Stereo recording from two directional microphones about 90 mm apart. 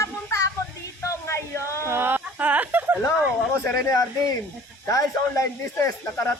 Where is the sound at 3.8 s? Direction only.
40° left (ahead or behind).